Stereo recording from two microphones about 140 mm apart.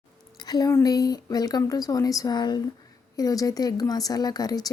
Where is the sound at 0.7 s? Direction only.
25° left (ahead or behind).